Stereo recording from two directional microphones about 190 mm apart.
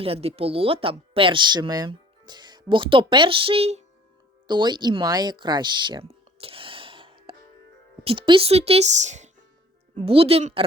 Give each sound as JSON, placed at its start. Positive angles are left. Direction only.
{"t": 0.0, "sound": "speech", "side_deg": -30}
{"t": 4.4, "sound": "a sound", "side_deg": -25}
{"t": 8.0, "sound": "a woman's voice", "side_deg": -25}